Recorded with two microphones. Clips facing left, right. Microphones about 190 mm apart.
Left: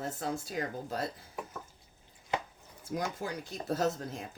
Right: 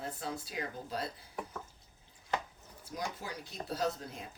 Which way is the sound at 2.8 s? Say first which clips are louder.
Left 5 dB; 50° left (ahead or behind).